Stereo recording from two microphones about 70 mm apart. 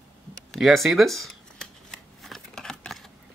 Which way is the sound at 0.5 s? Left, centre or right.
Centre.